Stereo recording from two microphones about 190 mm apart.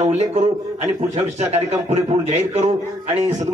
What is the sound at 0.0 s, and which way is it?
A man's voice, 35° right (ahead or behind).